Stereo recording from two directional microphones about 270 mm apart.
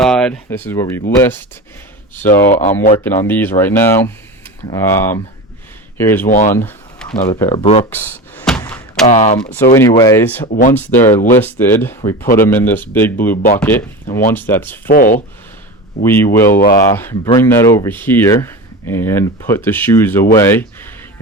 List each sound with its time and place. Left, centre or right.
0.0 s speech: centre
2.1 s speech: centre
6.2 s speech: left
6.5 s a sound: centre
7.3 s speech: centre
7.9 s thunk: centre
9.0 s speech: left
9.4 s speech: centre
10.4 s speech: left
10.8 s speech: centre
13.3 s speech: left
13.6 s speech: centre
14.8 s speech: left
16.0 s speech: centre